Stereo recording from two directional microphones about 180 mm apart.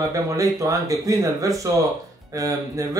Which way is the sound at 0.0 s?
20° right (ahead or behind).